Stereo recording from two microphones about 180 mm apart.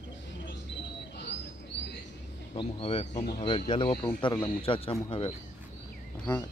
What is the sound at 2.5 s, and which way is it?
Speech, 35° left (ahead or behind).